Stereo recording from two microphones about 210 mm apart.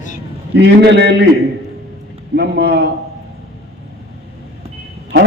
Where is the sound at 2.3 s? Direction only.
50° right (ahead or behind).